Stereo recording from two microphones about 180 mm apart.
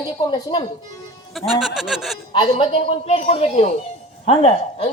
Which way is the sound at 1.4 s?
Centre (ahead or behind).